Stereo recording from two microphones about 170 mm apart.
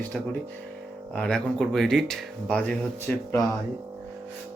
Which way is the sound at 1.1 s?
5° left (ahead or behind).